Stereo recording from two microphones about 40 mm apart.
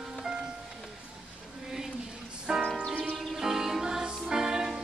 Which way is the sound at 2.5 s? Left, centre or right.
Centre.